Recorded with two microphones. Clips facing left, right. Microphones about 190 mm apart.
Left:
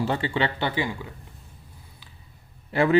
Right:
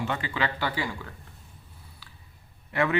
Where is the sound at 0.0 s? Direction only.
30° left (ahead or behind).